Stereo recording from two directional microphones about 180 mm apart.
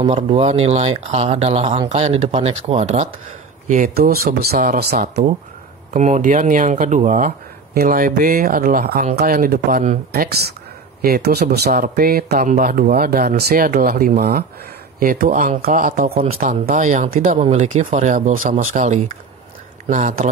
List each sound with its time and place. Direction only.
0.0 s speech: 30° right (ahead or behind)
3.6 s speech: 50° right (ahead or behind)
5.9 s speech: 40° right (ahead or behind)
11.0 s speech: 60° right (ahead or behind)